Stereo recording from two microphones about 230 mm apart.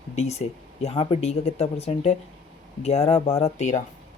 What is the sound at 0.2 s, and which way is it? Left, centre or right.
Speech, left.